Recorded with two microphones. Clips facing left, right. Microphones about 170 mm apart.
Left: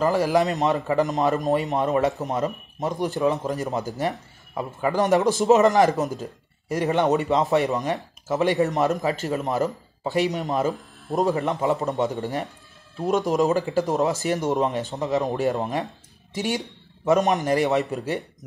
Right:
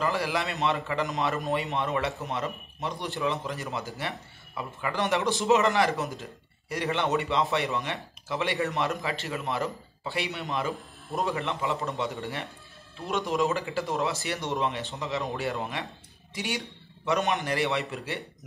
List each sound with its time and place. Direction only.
0.0 s speech: 40° left (ahead or behind)